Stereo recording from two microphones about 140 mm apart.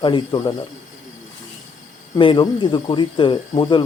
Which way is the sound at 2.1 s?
35° left (ahead or behind).